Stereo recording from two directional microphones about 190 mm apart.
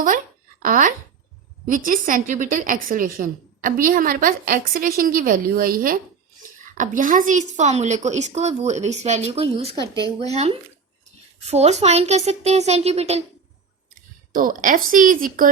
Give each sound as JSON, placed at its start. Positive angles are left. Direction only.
{"t": 0.6, "sound": "a woman's voice", "side_deg": -45}
{"t": 14.3, "sound": "a woman's voice", "side_deg": -45}